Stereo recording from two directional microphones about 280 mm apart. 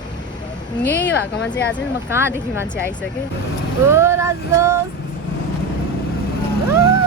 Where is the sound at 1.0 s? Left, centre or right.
Left.